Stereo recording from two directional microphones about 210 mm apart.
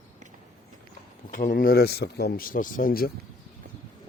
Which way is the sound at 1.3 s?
40° left (ahead or behind).